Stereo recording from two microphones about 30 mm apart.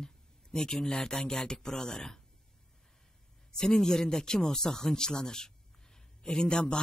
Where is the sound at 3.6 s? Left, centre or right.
Left.